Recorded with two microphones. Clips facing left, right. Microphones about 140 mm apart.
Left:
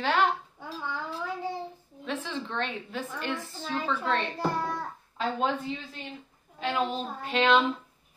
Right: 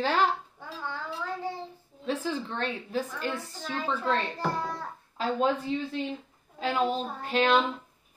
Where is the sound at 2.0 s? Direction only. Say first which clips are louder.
Right 3 dB; 35° right (ahead or behind).